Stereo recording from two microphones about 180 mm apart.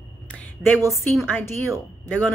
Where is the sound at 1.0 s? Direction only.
10° left (ahead or behind).